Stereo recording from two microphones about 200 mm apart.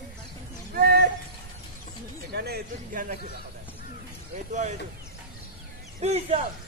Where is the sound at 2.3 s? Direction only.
55° right (ahead or behind).